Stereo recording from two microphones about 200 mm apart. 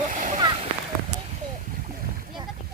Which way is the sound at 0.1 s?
40° right (ahead or behind).